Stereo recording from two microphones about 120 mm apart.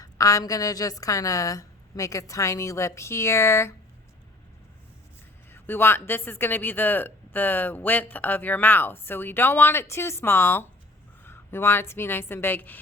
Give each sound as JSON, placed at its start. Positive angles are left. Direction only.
{"t": 0.0, "sound": "a woman's voice", "side_deg": 30}
{"t": 5.5, "sound": "a woman's voice", "side_deg": 15}